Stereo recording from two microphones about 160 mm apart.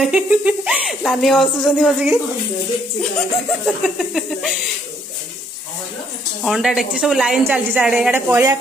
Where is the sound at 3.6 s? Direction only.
Centre (ahead or behind).